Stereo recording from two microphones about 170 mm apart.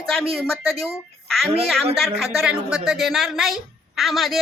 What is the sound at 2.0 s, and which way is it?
A woman's voice, centre (ahead or behind).